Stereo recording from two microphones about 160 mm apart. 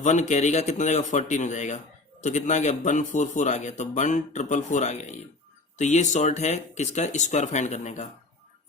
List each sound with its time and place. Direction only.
0.0 s a man's voice: 50° left (ahead or behind)